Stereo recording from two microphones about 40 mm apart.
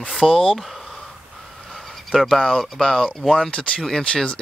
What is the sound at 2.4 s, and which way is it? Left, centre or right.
Speech, centre.